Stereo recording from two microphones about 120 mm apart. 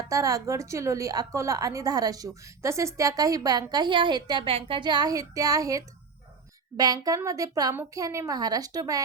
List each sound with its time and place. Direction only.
0.0 s a woman's voice: 30° right (ahead or behind)